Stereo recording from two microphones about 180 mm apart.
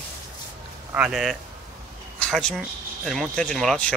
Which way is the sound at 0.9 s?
5° right (ahead or behind).